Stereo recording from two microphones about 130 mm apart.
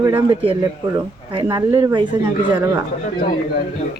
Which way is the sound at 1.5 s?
25° right (ahead or behind).